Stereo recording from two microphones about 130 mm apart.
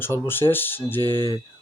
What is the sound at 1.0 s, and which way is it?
Speech, 30° right (ahead or behind).